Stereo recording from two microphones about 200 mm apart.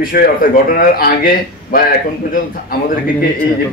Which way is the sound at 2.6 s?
45° left (ahead or behind).